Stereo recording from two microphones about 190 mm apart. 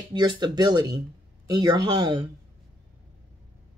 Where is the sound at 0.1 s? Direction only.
25° right (ahead or behind).